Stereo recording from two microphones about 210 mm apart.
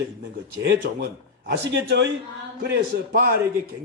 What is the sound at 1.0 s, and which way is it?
A man's voice, 50° right (ahead or behind).